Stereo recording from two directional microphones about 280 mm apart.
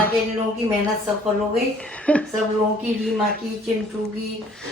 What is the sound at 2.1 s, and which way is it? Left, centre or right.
Speech, centre.